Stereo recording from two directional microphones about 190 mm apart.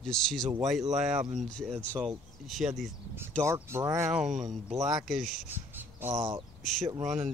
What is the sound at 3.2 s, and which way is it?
Speech, 15° right (ahead or behind).